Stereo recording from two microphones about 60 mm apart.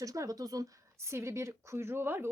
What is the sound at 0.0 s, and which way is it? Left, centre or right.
Speech, right.